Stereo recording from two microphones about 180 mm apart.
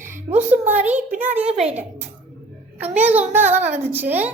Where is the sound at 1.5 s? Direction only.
35° right (ahead or behind).